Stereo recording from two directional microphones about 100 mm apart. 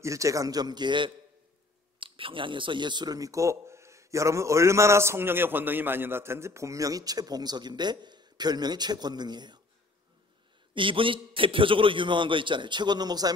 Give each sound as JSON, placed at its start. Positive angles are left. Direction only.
{"t": 0.0, "sound": "speech", "side_deg": -35}
{"t": 2.0, "sound": "speech", "side_deg": -60}
{"t": 10.7, "sound": "a man's voice", "side_deg": -60}